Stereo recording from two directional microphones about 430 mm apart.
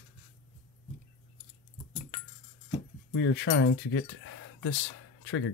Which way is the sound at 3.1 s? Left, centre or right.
Left.